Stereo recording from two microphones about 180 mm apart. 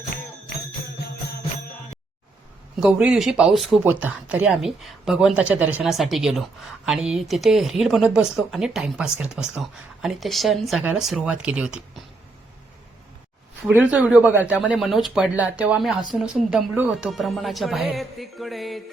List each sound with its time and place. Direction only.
0.1 s music: 60° left (ahead or behind)
2.8 s speech: 5° right (ahead or behind)
13.7 s speech: 10° right (ahead or behind)